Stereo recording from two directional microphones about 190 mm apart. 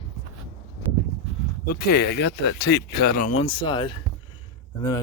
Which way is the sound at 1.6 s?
55° left (ahead or behind).